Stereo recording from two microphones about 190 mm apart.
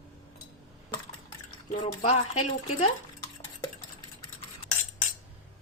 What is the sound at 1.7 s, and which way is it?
A woman's voice, 35° left (ahead or behind).